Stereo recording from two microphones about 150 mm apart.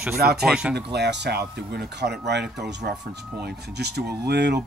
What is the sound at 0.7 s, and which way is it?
Speech, 90° right.